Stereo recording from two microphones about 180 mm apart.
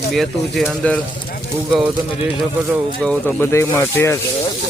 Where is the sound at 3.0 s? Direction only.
5° left (ahead or behind).